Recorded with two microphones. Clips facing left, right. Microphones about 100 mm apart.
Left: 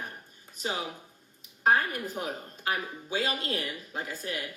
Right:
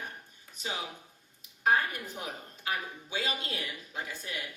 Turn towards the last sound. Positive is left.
turn(degrees=45)  # may be behind; listen again after turning